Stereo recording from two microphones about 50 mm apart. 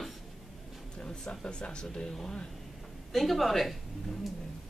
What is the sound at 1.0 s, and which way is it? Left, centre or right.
Speech, centre.